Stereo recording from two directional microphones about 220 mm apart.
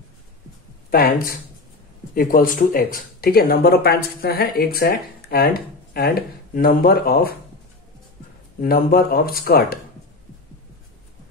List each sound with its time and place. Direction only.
0.8 s speech: 40° left (ahead or behind)
8.5 s speech: 45° left (ahead or behind)